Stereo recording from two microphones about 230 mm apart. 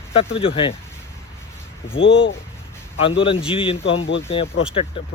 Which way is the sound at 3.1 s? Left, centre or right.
Left.